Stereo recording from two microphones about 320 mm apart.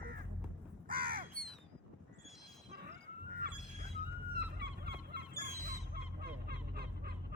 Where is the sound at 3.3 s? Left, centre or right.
Right.